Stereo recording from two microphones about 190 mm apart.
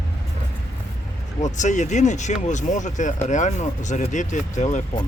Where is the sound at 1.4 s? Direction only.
40° left (ahead or behind).